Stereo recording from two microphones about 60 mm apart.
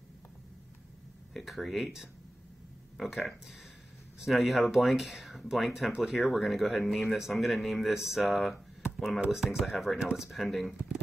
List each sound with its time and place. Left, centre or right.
1.3 s speech: centre
3.0 s speech: centre
10.0 s speech: centre
10.3 s speech: centre